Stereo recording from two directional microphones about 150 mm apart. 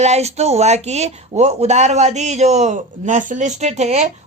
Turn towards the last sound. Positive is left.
turn(degrees=-50)  # may be behind; listen again after turning